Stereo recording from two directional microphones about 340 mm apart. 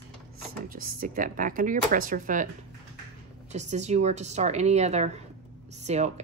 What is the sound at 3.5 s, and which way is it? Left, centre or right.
Speech, centre.